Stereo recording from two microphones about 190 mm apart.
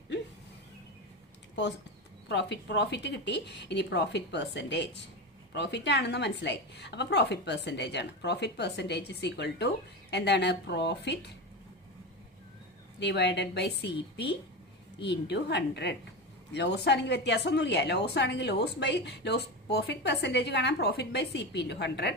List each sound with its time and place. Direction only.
2.3 s a woman's voice: 65° left (ahead or behind)
13.0 s a woman's voice: 65° left (ahead or behind)